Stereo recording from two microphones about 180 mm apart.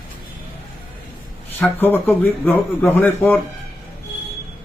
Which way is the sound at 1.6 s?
10° left (ahead or behind).